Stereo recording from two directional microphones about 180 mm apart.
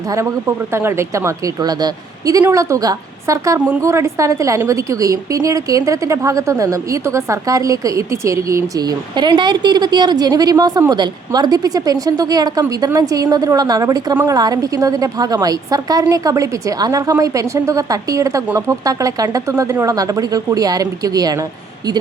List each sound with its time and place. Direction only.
0.1 s a woman's voice: 15° right (ahead or behind)